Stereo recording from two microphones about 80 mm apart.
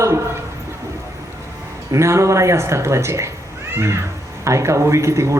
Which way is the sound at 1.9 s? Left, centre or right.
Right.